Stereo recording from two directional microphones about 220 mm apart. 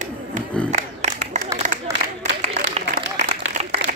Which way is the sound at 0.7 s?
30° right (ahead or behind).